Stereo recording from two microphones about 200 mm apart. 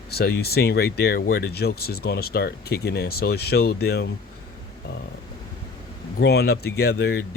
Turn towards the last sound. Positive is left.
turn(degrees=55)  # may be behind; listen again after turning